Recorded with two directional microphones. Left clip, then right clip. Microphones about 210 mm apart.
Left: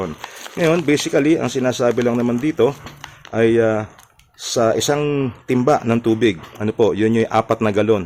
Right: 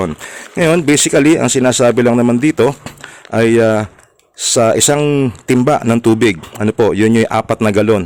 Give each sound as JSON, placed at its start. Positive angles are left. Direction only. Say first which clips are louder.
{"t": 0.5, "sound": "speech", "louder": "right 5 dB", "side_deg": -45}